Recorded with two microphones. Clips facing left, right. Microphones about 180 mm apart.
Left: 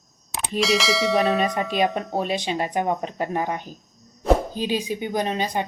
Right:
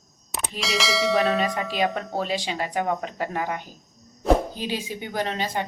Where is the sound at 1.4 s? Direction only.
20° left (ahead or behind).